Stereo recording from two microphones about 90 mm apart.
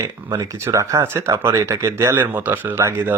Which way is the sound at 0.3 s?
40° right (ahead or behind).